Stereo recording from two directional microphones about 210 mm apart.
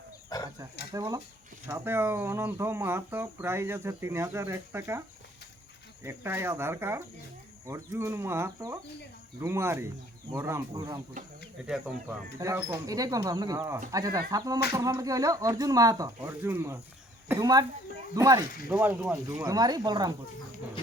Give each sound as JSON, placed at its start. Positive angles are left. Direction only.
{"t": 0.3, "sound": "wild animals", "side_deg": 20}
{"t": 0.9, "sound": "speech", "side_deg": -15}
{"t": 12.4, "sound": "speech", "side_deg": -15}